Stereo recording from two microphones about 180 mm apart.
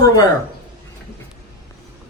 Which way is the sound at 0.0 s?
20° left (ahead or behind).